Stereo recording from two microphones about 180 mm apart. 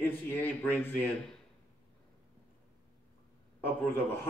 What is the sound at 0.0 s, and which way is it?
Speech, 10° left (ahead or behind).